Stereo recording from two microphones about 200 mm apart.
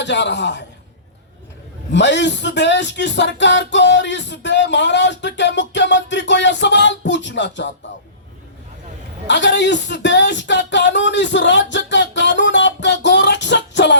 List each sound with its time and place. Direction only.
0.0 s speech: 60° left (ahead or behind)
1.9 s speech: 60° left (ahead or behind)
9.2 s speech: 60° left (ahead or behind)